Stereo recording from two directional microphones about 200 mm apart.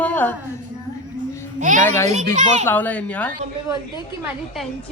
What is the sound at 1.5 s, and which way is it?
Speech, 40° right (ahead or behind).